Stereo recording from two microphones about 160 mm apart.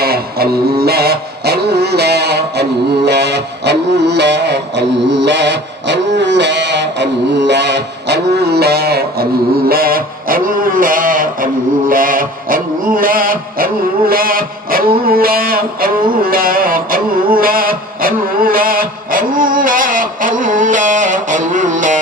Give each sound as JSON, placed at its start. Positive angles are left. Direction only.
{"t": 0.0, "sound": "music", "side_deg": -75}
{"t": 9.6, "sound": "music", "side_deg": -65}